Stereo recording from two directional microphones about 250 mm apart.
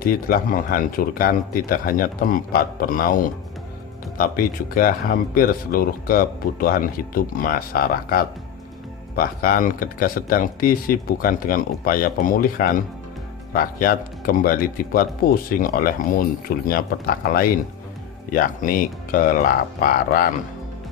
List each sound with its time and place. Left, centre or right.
0.0 s speech: left
4.2 s speech: left